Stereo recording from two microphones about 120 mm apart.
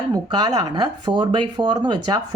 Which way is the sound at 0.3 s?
40° right (ahead or behind).